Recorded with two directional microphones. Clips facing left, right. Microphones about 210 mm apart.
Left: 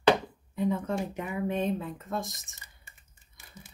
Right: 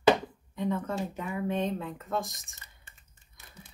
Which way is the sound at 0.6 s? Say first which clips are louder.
Left 2 dB; 10° left (ahead or behind).